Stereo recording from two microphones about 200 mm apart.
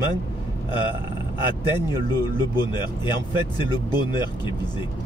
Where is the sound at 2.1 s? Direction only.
20° left (ahead or behind).